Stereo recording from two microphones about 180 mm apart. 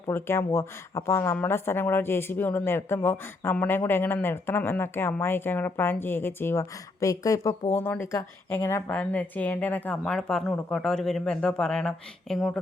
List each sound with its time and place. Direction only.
0.1 s speech: 15° left (ahead or behind)